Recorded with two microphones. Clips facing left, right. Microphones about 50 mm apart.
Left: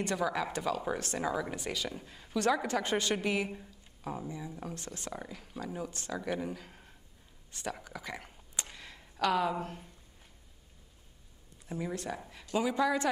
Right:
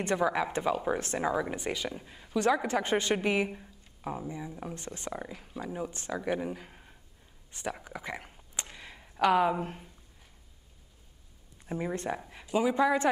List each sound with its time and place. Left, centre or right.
0.0 s speech: right
11.6 s speech: right
12.3 s speech: centre